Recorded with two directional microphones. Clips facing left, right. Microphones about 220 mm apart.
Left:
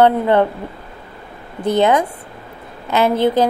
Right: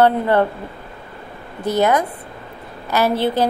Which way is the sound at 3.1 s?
50° left (ahead or behind).